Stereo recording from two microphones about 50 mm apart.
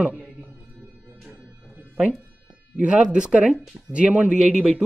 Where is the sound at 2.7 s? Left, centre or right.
Right.